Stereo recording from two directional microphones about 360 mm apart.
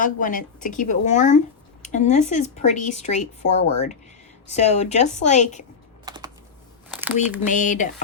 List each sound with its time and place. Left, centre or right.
0.0 s speech: left
6.1 s typing: centre
6.9 s speech: centre
7.4 s speech: left